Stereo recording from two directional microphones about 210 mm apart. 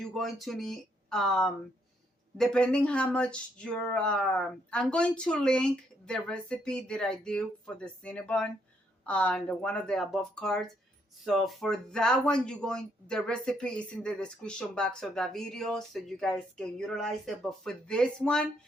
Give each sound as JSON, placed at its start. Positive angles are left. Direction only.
{"t": 0.0, "sound": "speech", "side_deg": 0}